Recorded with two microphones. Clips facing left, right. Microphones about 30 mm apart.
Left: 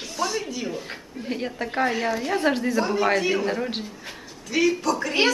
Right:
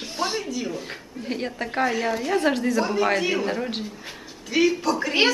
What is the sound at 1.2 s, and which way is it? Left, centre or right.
Speech, centre.